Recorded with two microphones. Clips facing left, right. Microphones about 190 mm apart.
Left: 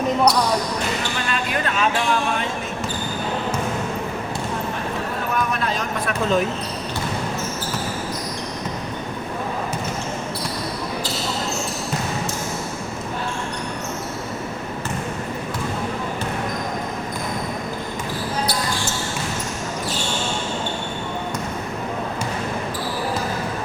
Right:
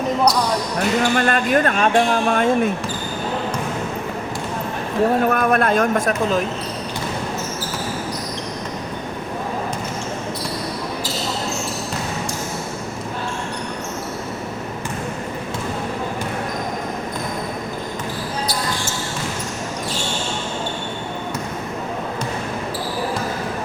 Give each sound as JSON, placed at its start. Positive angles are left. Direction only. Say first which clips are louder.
{"t": 1.1, "sound": "speech", "louder": "right 8 dB", "side_deg": -55}
{"t": 5.3, "sound": "a man's voice", "louder": "right 6 dB", "side_deg": -55}